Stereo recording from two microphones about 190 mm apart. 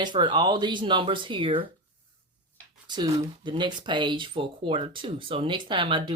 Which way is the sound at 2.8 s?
25° right (ahead or behind).